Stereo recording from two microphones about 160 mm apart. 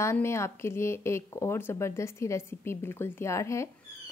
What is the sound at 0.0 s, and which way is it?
A woman's voice, 15° left (ahead or behind).